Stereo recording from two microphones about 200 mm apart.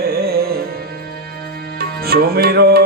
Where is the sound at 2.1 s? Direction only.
50° right (ahead or behind).